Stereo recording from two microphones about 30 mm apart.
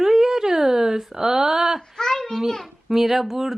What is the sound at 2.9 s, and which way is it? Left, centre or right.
Speech, centre.